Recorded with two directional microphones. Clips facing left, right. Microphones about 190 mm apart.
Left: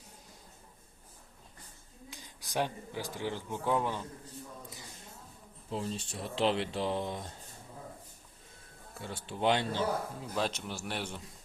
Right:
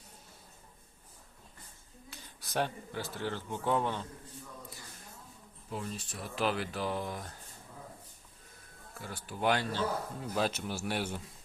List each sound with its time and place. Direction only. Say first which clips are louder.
2.0 s speech: left 2 dB; 15° left (ahead or behind)
5.7 s speech: left 3 dB; 30° left (ahead or behind)
9.0 s speech: left 2 dB; 25° left (ahead or behind)
10.2 s a man's voice: right 2 dB; centre (ahead or behind)